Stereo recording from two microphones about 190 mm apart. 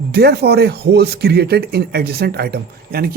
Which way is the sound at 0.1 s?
60° right (ahead or behind).